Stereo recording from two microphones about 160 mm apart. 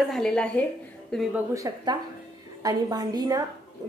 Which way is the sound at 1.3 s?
20° right (ahead or behind).